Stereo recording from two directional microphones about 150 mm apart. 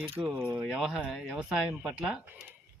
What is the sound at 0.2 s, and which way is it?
Speech, 10° right (ahead or behind).